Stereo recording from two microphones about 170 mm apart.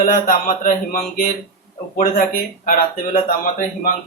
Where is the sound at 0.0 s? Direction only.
55° left (ahead or behind).